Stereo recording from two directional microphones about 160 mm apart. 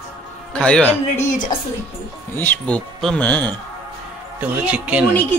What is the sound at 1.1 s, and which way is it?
Speech, 50° left (ahead or behind).